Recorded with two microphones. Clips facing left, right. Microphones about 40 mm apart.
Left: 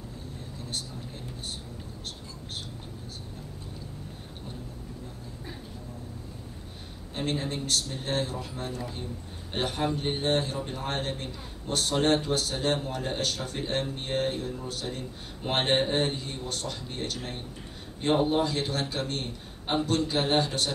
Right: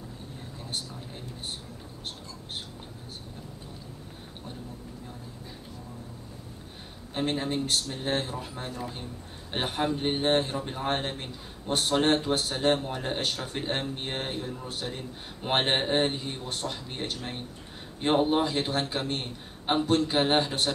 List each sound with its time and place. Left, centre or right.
7.2 s a man's voice: centre